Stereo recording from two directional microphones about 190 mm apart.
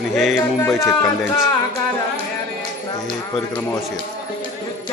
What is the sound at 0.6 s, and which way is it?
Speech, 15° left (ahead or behind).